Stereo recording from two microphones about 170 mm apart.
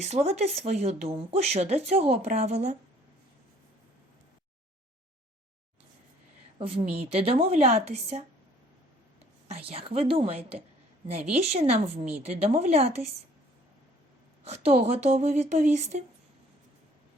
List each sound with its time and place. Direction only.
0.0 s speech: 40° right (ahead or behind)
6.6 s speech: 35° right (ahead or behind)
9.5 s speech: 35° right (ahead or behind)
14.4 s speech: 35° right (ahead or behind)